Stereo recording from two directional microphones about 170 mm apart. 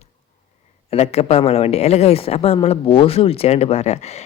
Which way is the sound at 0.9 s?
40° left (ahead or behind).